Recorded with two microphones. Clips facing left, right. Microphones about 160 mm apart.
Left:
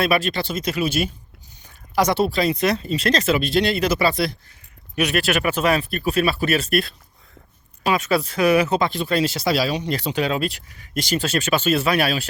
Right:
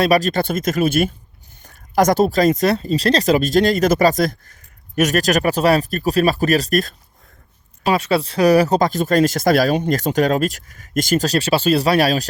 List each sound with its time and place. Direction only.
0.0 s speech: 40° right (ahead or behind)